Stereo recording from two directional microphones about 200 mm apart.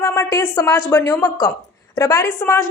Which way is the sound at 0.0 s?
15° left (ahead or behind).